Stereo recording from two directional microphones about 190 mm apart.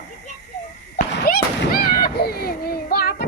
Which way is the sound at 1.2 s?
50° left (ahead or behind).